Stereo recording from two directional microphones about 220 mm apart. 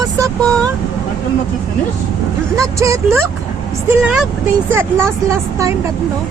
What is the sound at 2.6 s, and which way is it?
Speech, 15° right (ahead or behind).